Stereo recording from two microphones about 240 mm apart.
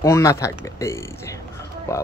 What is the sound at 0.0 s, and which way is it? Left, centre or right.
Speech, centre.